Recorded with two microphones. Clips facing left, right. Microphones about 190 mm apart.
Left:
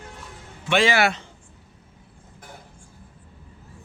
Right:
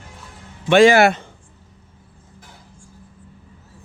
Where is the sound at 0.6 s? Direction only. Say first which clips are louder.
Right 9 dB; 45° right (ahead or behind).